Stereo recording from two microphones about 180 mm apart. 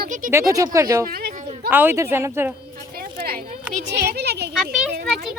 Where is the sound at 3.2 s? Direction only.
55° right (ahead or behind).